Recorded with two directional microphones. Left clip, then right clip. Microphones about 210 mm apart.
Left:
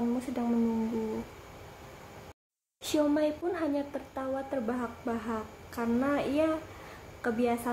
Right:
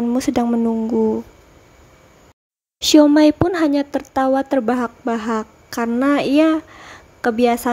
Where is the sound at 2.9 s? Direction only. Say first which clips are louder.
Right 16 dB; 50° right (ahead or behind).